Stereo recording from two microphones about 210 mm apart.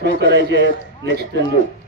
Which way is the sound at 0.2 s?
55° right (ahead or behind).